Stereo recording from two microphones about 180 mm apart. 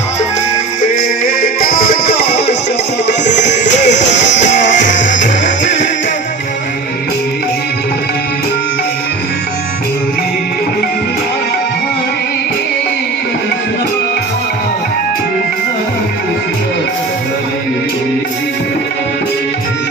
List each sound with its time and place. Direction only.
0.8 s music: 50° left (ahead or behind)
3.2 s music: 40° left (ahead or behind)